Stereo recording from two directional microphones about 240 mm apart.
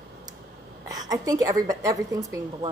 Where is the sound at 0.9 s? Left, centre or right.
Centre.